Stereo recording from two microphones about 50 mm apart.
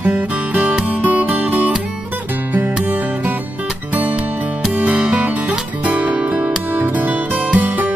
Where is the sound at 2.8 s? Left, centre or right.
Right.